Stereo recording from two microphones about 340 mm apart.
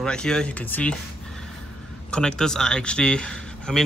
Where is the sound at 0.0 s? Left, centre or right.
Centre.